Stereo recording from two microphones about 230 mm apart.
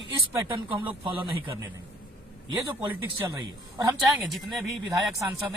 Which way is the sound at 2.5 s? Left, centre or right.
Centre.